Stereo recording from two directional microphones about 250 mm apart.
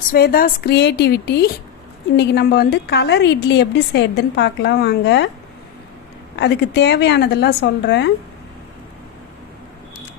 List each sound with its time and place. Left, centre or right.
0.1 s a woman's voice: left
6.3 s a woman's voice: left